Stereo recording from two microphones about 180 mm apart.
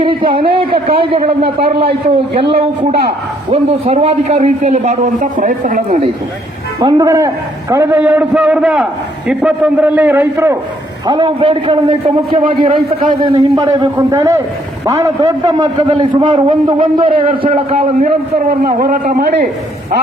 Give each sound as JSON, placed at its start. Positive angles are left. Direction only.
{"t": 0.0, "sound": "a sound", "side_deg": -30}
{"t": 0.3, "sound": "a man's voice", "side_deg": -30}
{"t": 3.5, "sound": "a man's voice", "side_deg": -35}
{"t": 6.7, "sound": "a man's voice", "side_deg": -25}
{"t": 13.9, "sound": "a man's voice", "side_deg": -15}
{"t": 18.6, "sound": "a man's voice", "side_deg": -55}